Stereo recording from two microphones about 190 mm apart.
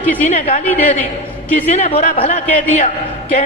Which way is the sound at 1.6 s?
35° left (ahead or behind).